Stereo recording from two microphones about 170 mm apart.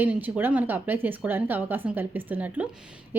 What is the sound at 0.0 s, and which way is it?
A woman's voice, 10° right (ahead or behind).